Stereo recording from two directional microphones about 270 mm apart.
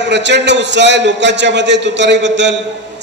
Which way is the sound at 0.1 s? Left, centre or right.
Right.